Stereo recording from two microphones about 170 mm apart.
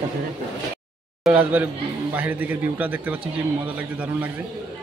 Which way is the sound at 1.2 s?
10° right (ahead or behind).